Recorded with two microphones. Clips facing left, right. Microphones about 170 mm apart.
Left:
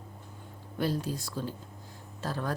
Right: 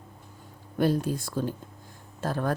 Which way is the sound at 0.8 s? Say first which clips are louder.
Right 6 dB; 55° right (ahead or behind).